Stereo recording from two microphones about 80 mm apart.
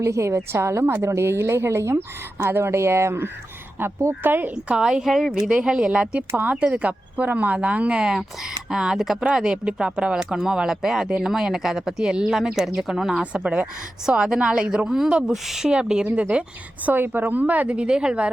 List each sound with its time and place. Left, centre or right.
0.0 s a woman's voice: right
4.5 s a woman's voice: centre